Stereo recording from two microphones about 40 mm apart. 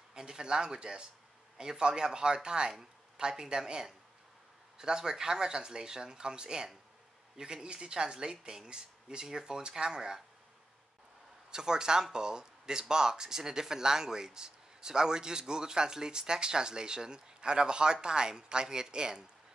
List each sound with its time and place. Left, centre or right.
0.1 s speech: right
11.5 s speech: centre